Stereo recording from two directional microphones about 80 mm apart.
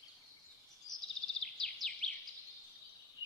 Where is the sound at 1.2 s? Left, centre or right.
Centre.